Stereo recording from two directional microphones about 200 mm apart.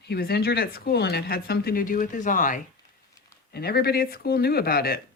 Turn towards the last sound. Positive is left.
turn(degrees=50)  # may be behind; listen again after turning